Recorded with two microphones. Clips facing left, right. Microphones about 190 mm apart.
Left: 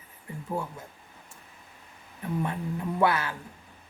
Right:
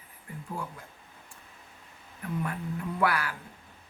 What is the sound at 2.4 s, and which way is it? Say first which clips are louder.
Speech: left 3 dB; 25° left (ahead or behind).